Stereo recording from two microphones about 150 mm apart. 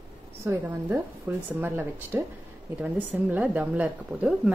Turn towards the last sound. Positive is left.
turn(degrees=-10)  # may be behind; listen again after turning